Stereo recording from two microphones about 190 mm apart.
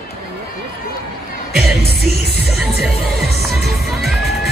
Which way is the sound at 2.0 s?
55° right (ahead or behind).